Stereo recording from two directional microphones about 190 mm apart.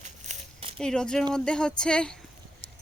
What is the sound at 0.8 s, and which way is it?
Speech, 5° left (ahead or behind).